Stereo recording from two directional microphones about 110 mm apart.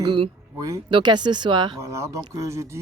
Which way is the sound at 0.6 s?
30° right (ahead or behind).